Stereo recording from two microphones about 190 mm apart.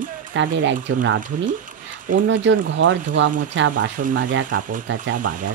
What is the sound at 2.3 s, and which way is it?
Speech, 75° right (ahead or behind).